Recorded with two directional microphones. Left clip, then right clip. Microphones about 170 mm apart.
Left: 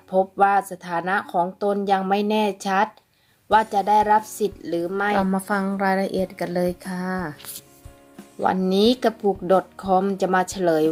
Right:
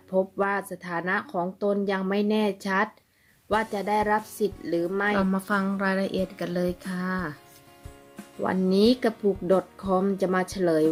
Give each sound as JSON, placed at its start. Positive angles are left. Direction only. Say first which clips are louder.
{"t": 0.3, "sound": "speech", "louder": "left 9 dB", "side_deg": -5}
{"t": 8.7, "sound": "speech", "louder": "even", "side_deg": -10}